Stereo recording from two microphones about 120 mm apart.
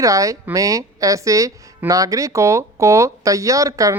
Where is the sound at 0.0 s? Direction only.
25° right (ahead or behind).